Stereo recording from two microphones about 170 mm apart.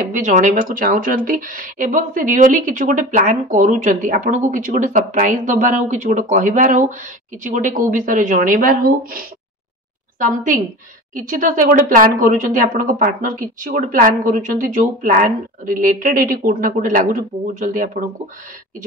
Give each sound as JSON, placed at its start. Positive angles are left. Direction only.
{"t": 0.1, "sound": "a woman's voice", "side_deg": -45}